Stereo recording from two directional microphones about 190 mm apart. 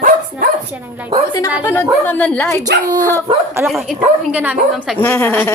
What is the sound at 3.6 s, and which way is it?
Speech, centre (ahead or behind).